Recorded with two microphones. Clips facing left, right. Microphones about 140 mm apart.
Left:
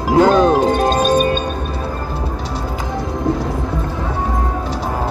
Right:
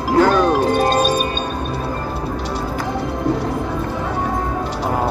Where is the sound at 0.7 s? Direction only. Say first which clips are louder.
Left 2 dB; 45° left (ahead or behind).